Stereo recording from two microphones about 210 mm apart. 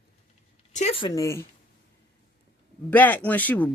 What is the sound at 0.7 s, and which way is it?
Speech, 30° left (ahead or behind).